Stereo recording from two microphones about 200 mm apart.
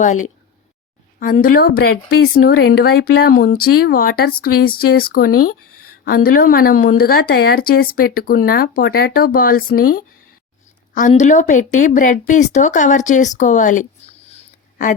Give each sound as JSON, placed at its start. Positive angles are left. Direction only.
{"t": 0.0, "sound": "speech", "side_deg": 40}
{"t": 11.1, "sound": "speech", "side_deg": 35}